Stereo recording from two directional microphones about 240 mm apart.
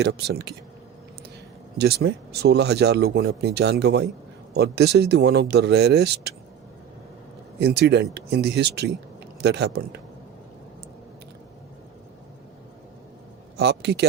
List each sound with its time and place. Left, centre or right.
0.0 s speech: right
1.8 s speech: right
7.6 s speech: right
13.6 s speech: right